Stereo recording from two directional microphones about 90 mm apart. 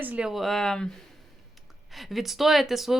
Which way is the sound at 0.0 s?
15° right (ahead or behind).